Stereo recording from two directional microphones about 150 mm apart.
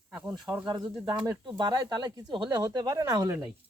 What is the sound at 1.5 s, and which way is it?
Speech, 30° right (ahead or behind).